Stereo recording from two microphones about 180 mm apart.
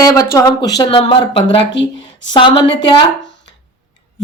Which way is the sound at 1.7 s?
80° left.